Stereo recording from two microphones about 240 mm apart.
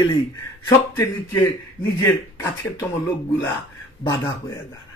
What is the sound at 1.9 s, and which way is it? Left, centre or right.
Speech, centre.